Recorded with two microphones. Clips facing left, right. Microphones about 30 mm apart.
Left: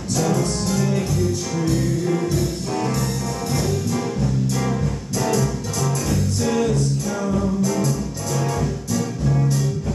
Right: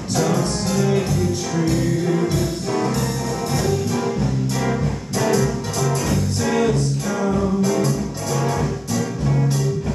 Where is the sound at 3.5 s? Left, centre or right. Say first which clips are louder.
Right 2 dB; centre.